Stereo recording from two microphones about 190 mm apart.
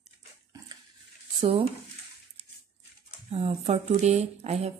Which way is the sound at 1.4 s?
30° right (ahead or behind).